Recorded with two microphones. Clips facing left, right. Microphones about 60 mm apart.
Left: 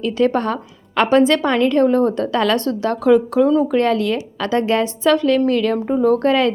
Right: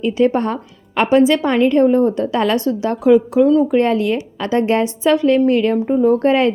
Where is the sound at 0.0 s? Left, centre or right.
Centre.